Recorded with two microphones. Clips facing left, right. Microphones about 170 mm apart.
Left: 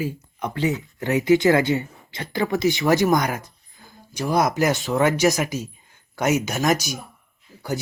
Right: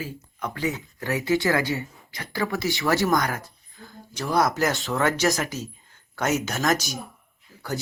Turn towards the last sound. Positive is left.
turn(degrees=15)  # may be behind; listen again after turning